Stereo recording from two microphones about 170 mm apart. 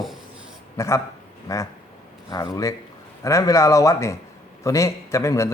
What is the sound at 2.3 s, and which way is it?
A man's voice, 20° left (ahead or behind).